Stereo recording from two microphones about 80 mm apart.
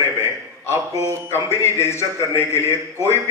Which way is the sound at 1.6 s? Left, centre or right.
Left.